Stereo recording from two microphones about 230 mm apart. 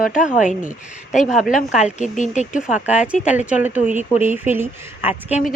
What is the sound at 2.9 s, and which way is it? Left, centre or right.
A woman's voice, centre.